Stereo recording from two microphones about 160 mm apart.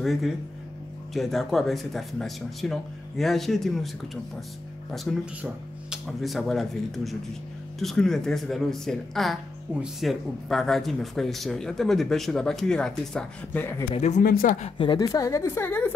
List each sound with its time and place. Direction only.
0.0 s speech: centre (ahead or behind)
13.9 s speech: 45° left (ahead or behind)
14.2 s speech: 60° left (ahead or behind)
14.8 s a woman's voice: 25° left (ahead or behind)